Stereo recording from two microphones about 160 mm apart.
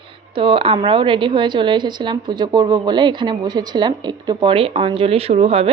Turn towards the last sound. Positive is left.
turn(degrees=-40)  # may be behind; listen again after turning